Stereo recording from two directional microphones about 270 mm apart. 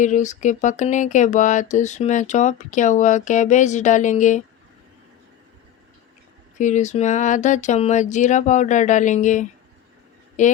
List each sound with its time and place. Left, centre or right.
0.0 s speech: left
6.6 s speech: left